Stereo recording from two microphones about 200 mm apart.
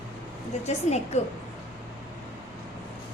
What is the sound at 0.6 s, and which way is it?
Speech, 35° left (ahead or behind).